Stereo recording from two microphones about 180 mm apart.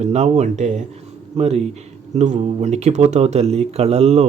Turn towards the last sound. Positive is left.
turn(degrees=-40)  # may be behind; listen again after turning